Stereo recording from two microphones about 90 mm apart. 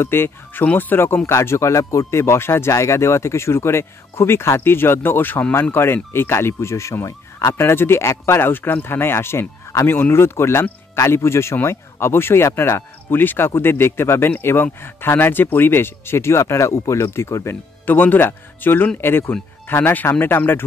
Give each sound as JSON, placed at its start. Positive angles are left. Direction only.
{"t": 0.0, "sound": "speech", "side_deg": 25}
{"t": 17.8, "sound": "speech", "side_deg": 20}